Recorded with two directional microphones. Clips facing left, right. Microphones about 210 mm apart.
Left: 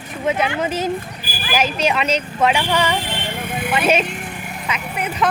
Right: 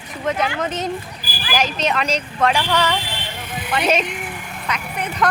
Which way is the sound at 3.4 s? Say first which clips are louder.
Left 5 dB; 55° left (ahead or behind).